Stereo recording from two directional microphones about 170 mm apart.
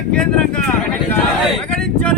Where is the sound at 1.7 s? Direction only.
5° left (ahead or behind).